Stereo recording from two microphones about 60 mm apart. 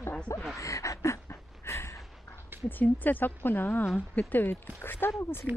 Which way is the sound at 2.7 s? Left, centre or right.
Left.